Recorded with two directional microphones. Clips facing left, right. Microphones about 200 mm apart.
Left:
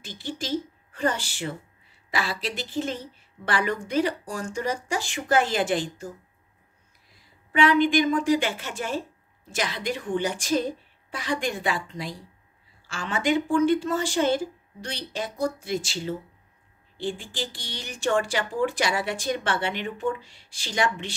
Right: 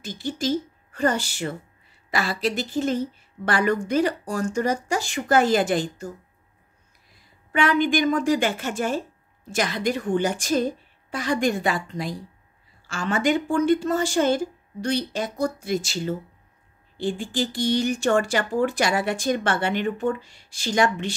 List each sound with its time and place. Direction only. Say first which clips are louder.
0.0 s a woman's voice: right 7 dB; 45° right (ahead or behind)
7.5 s speech: left 1 dB; 45° right (ahead or behind)